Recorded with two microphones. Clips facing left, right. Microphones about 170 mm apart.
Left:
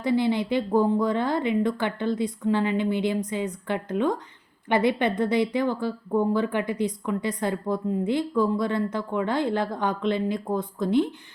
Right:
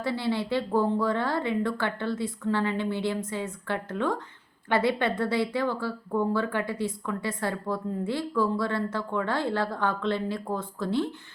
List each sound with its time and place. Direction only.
0.0 s speech: 15° left (ahead or behind)